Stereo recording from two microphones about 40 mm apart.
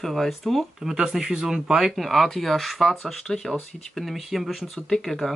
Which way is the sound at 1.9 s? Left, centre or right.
Centre.